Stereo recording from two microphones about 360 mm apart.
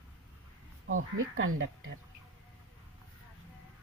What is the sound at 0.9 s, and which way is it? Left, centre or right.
Speech, right.